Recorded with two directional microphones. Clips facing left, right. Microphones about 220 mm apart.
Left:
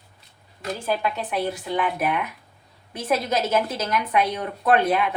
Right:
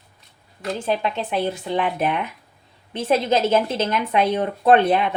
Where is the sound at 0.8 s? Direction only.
25° right (ahead or behind).